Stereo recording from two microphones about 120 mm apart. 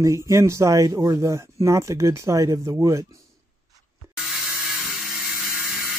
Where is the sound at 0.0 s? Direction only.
25° right (ahead or behind).